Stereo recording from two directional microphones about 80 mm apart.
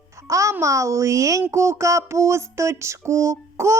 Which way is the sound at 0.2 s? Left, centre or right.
Right.